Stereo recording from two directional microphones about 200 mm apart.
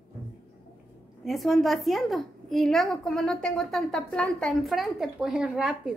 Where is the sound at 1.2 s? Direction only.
Centre (ahead or behind).